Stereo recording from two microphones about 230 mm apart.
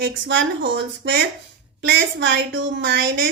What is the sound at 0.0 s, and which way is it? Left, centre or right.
Speech, right.